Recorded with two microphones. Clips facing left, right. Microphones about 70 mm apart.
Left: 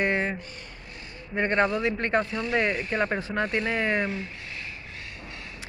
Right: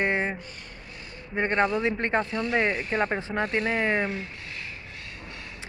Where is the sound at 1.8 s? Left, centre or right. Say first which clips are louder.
Even; right.